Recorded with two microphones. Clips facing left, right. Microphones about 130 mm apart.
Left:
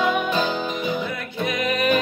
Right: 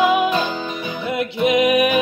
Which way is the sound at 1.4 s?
15° right (ahead or behind).